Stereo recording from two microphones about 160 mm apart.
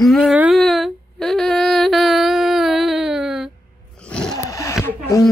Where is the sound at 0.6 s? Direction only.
Centre (ahead or behind).